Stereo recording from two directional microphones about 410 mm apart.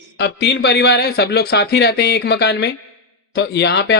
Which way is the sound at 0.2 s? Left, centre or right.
Left.